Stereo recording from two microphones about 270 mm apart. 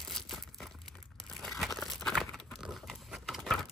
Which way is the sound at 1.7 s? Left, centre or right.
Centre.